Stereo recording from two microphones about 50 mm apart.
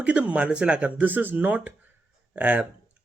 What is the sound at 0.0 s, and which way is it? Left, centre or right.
A man's voice, right.